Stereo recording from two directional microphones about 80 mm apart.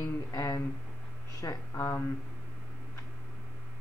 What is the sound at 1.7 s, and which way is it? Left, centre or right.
Speech, left.